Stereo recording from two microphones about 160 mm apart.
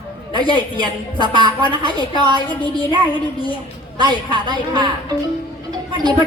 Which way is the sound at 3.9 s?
30° right (ahead or behind).